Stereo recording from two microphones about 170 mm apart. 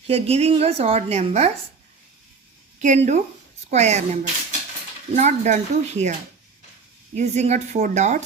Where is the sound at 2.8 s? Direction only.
45° right (ahead or behind).